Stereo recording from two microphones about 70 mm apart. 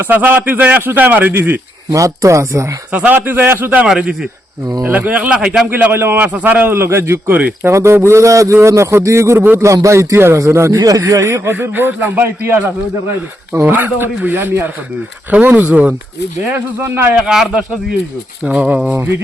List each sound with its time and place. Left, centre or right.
0.0 s a man's voice: right
1.9 s a man's voice: right
2.9 s a man's voice: right
4.9 s speech: right
5.7 s speech: right
6.2 s a man's voice: right
7.3 s a man's voice: right
7.7 s a man's voice: right
10.8 s speech: right
11.1 s speech: right
13.5 s a man's voice: right
17.2 s speech: centre